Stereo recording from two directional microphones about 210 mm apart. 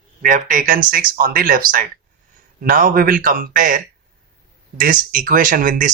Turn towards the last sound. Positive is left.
turn(degrees=-40)  # may be behind; listen again after turning